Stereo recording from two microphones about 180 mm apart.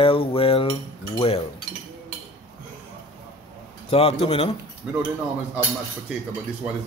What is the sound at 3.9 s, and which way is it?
Mantra, 35° left (ahead or behind).